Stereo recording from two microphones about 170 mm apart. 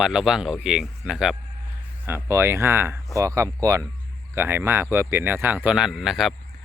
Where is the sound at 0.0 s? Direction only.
5° right (ahead or behind).